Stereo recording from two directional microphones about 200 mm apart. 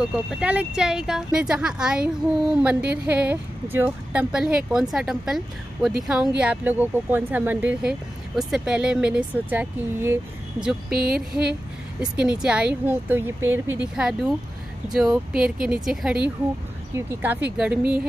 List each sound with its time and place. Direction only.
0.0 s a woman's voice: 5° right (ahead or behind)
10.9 s a sound: 50° right (ahead or behind)
11.1 s a woman's voice: 5° right (ahead or behind)